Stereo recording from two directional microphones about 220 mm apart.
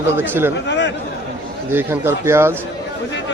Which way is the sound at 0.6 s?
55° left (ahead or behind).